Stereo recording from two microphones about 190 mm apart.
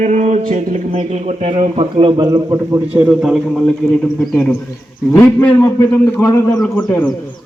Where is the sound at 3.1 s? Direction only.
5° right (ahead or behind).